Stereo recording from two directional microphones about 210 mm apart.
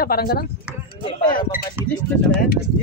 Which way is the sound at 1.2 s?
40° left (ahead or behind).